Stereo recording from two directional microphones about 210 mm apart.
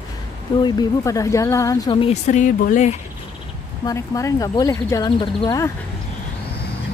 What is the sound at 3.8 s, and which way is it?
Speech, 15° left (ahead or behind).